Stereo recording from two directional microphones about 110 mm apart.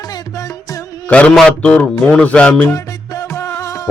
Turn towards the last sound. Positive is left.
turn(degrees=30)  # may be behind; listen again after turning